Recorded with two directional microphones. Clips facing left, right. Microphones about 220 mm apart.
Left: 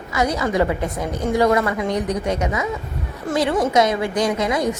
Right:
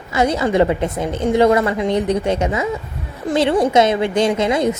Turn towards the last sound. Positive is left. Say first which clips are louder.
# right 4 dB
turn(degrees=-25)  # may be behind; listen again after turning